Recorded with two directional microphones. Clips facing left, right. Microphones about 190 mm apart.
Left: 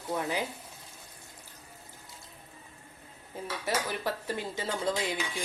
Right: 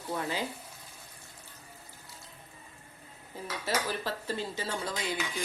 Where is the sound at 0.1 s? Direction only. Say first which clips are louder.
Left 2 dB; 15° left (ahead or behind).